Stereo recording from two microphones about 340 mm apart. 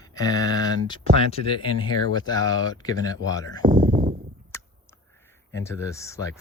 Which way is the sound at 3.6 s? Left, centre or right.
Right.